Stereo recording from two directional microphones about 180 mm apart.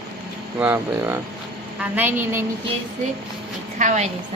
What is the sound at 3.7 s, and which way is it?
Speech, 40° right (ahead or behind).